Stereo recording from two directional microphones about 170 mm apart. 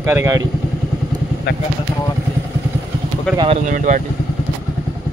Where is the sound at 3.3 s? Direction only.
30° right (ahead or behind).